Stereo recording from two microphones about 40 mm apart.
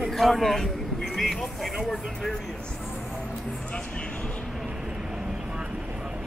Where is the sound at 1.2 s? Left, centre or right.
Centre.